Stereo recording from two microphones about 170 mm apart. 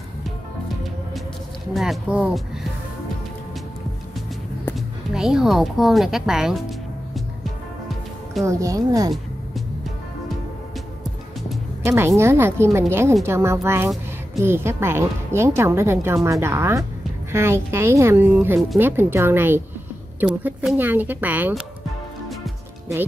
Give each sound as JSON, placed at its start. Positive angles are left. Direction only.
{"t": 1.7, "sound": "speech", "side_deg": 0}
{"t": 4.7, "sound": "a woman's voice", "side_deg": -5}
{"t": 8.5, "sound": "speech", "side_deg": -20}
{"t": 11.8, "sound": "a woman's voice", "side_deg": -15}